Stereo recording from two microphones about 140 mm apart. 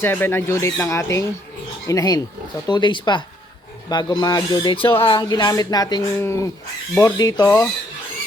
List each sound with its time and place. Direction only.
0.0 s speech: 15° left (ahead or behind)